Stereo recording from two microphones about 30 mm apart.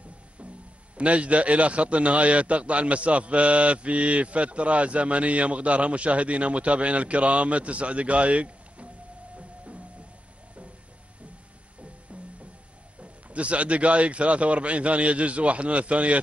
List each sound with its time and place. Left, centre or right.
0.9 s a man's voice: right
13.0 s a man's voice: right